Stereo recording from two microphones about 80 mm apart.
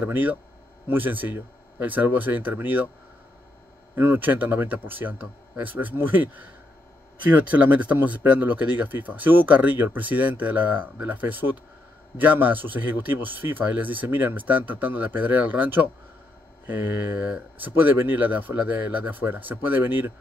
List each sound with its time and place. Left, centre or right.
0.0 s speech: right
3.9 s speech: right
7.4 s speech: centre